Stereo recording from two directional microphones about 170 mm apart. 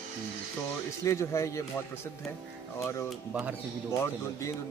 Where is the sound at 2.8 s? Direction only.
15° left (ahead or behind).